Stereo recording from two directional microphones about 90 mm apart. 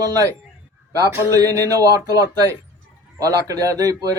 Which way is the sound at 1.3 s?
40° right (ahead or behind).